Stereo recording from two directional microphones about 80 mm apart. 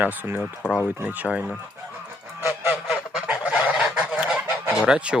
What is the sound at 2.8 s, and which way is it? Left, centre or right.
Goose, centre.